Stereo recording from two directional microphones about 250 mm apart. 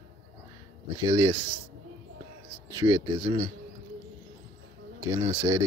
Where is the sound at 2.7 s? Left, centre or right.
Centre.